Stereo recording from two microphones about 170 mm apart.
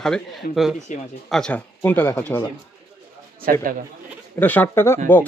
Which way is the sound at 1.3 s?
5° left (ahead or behind).